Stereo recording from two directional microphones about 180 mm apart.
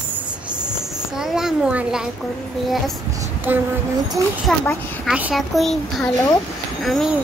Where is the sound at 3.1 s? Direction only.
10° right (ahead or behind).